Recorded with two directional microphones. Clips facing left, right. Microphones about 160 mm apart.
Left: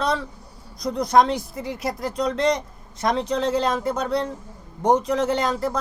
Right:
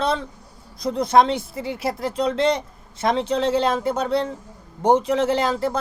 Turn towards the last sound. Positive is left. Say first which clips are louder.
# right 2 dB
turn(degrees=-30)  # may be behind; listen again after turning